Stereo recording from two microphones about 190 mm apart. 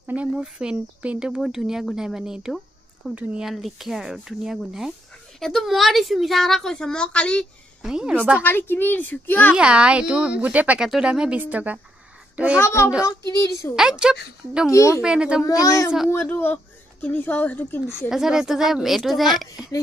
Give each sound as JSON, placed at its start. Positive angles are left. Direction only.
{"t": 0.0, "sound": "a woman's voice", "side_deg": -5}
{"t": 8.4, "sound": "a woman's voice", "side_deg": 10}
{"t": 9.6, "sound": "a woman's voice", "side_deg": -5}
{"t": 12.5, "sound": "a woman's voice", "side_deg": 15}
{"t": 13.7, "sound": "a woman's voice", "side_deg": -5}
{"t": 14.7, "sound": "a woman's voice", "side_deg": 15}
{"t": 15.0, "sound": "a woman's voice", "side_deg": -5}
{"t": 15.4, "sound": "a woman's voice", "side_deg": 15}
{"t": 18.1, "sound": "a woman's voice", "side_deg": -5}